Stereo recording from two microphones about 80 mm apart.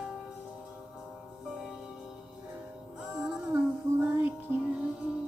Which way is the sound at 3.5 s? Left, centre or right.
Right.